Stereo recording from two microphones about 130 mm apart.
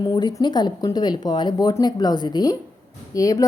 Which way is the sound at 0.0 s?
35° left (ahead or behind).